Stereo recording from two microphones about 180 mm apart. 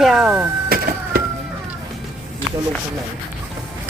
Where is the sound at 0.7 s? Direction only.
55° right (ahead or behind).